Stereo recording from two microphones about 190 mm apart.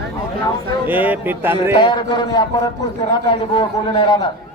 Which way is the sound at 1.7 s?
25° left (ahead or behind).